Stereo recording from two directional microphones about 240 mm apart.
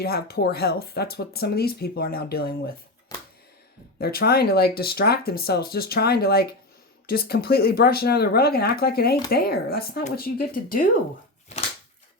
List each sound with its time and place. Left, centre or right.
0.0 s speech: left
3.1 s a sound: centre
3.9 s speech: left